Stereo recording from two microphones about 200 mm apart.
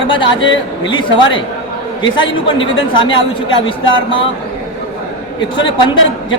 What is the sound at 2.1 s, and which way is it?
Speech, 25° left (ahead or behind).